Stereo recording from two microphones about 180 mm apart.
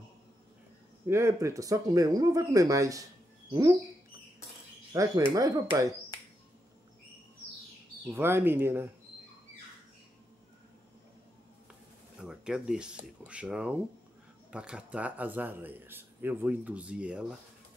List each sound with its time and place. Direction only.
1.0 s a man's voice: 15° right (ahead or behind)
4.9 s a man's voice: 20° right (ahead or behind)
8.1 s a man's voice: 15° right (ahead or behind)
12.2 s a man's voice: 5° right (ahead or behind)